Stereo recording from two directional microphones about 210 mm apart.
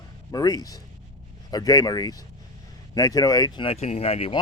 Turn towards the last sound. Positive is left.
turn(degrees=30)  # may be behind; listen again after turning